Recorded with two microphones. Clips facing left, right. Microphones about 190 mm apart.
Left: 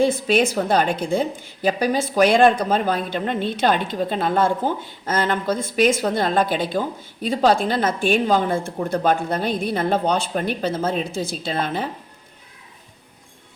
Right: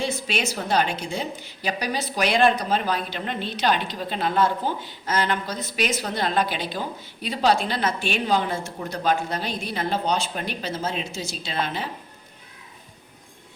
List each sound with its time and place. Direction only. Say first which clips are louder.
0.0 s a woman's voice: left 9 dB; 50° left (ahead or behind)